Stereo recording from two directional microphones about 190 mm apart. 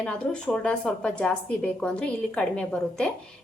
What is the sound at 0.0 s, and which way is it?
A woman's voice, 5° left (ahead or behind).